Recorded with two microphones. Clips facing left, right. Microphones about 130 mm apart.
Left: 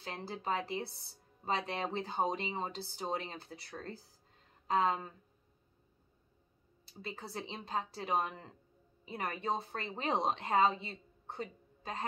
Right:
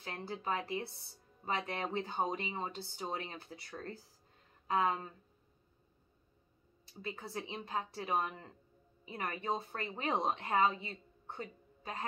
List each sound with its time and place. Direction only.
0.0 s speech: 30° left (ahead or behind)
7.0 s a woman's voice: 30° left (ahead or behind)